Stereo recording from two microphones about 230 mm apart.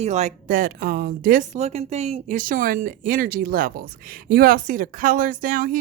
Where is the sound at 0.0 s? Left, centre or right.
Right.